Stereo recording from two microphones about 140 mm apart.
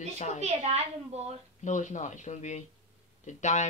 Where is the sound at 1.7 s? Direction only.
60° left (ahead or behind).